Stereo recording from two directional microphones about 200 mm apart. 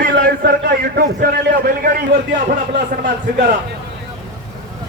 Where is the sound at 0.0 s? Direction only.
50° right (ahead or behind).